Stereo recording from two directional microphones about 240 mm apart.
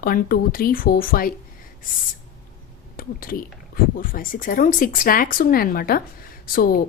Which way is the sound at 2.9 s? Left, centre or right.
Left.